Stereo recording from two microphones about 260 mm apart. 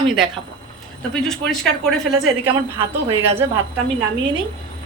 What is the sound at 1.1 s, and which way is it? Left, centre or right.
Speech, centre.